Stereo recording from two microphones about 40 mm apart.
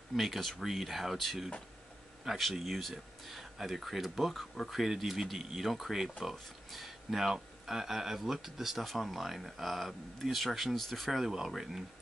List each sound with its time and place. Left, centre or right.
0.1 s speech: centre